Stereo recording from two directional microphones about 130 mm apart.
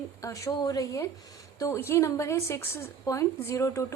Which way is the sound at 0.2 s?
25° left (ahead or behind).